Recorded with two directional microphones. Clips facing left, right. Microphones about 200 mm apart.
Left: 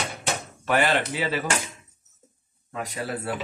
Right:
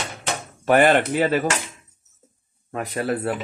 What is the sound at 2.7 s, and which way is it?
Speech, 55° right (ahead or behind).